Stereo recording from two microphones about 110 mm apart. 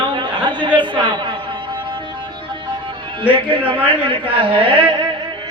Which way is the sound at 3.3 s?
50° right (ahead or behind).